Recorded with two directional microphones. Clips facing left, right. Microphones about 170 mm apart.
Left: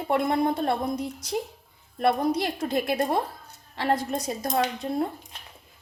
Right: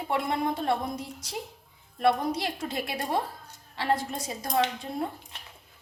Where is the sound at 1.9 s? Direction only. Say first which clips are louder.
Left 2 dB; 45° left (ahead or behind).